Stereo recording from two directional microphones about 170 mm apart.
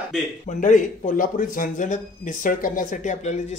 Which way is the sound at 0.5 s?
50° left (ahead or behind).